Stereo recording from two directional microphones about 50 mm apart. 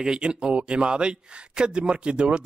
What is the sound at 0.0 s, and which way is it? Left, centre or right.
Speech, centre.